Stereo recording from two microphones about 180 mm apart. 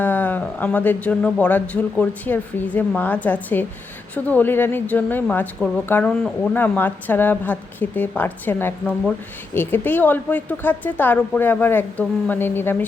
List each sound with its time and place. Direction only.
0.0 s speech: 10° left (ahead or behind)